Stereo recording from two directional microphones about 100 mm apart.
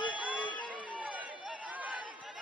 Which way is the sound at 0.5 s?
15° left (ahead or behind).